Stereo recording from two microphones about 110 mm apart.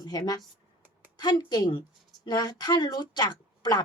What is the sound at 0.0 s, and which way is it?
Speech, 35° left (ahead or behind).